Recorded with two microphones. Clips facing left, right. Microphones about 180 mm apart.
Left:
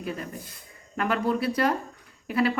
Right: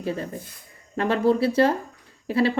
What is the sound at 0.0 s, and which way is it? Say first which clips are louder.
A woman's voice: right 5 dB; 30° right (ahead or behind).